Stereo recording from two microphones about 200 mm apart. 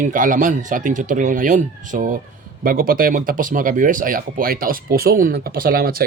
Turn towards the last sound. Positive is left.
turn(degrees=-45)  # may be behind; listen again after turning